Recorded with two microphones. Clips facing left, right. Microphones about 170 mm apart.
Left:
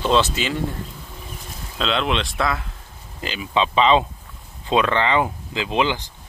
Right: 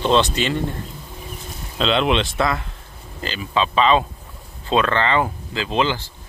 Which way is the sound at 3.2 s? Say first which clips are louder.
Even; 15° left (ahead or behind).